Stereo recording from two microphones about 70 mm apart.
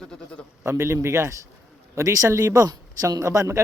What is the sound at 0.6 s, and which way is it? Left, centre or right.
A man's voice, right.